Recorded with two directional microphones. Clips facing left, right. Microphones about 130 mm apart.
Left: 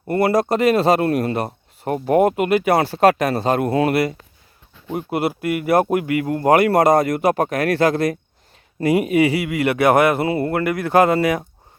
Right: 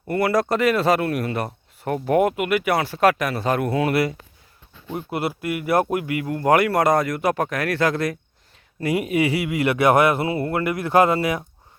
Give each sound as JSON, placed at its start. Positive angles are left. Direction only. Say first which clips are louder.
{"t": 0.1, "sound": "speech", "louder": "left 3 dB", "side_deg": 30}
{"t": 5.3, "sound": "speech", "louder": "left 3 dB", "side_deg": 55}
{"t": 9.5, "sound": "speech", "louder": "left 2 dB", "side_deg": 60}